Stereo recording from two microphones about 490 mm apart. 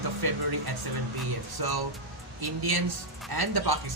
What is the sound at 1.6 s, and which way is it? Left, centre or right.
Speech, right.